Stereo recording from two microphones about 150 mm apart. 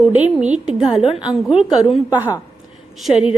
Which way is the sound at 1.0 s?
35° left (ahead or behind).